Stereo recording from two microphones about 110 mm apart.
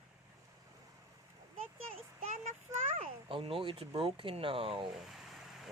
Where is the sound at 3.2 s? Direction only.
55° right (ahead or behind).